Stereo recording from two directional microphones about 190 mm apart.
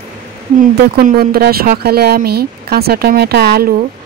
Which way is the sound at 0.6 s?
50° right (ahead or behind).